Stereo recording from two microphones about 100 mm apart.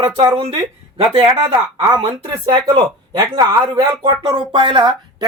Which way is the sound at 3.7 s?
55° right (ahead or behind).